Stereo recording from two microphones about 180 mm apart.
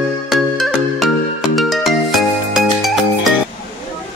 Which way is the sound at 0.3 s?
Centre (ahead or behind).